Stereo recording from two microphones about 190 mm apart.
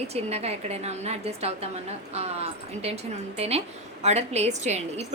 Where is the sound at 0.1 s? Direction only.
35° right (ahead or behind).